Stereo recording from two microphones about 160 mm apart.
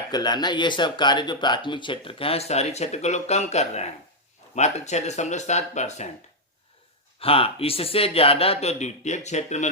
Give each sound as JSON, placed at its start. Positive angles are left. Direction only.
{"t": 0.1, "sound": "speech", "side_deg": 25}
{"t": 7.2, "sound": "speech", "side_deg": 35}